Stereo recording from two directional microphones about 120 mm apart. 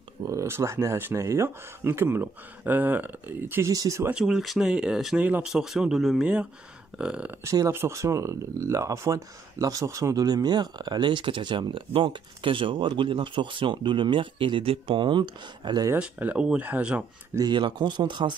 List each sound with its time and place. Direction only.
0.3 s speech: 25° right (ahead or behind)
3.7 s speech: 30° right (ahead or behind)
4.1 s speech: 5° right (ahead or behind)
7.4 s speech: 25° right (ahead or behind)
16.0 s speech: 10° right (ahead or behind)
17.3 s speech: 35° right (ahead or behind)